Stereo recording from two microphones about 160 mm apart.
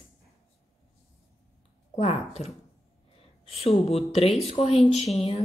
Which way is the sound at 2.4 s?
45° left (ahead or behind).